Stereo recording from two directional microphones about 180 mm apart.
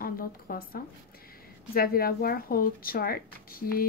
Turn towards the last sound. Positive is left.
turn(degrees=55)  # may be behind; listen again after turning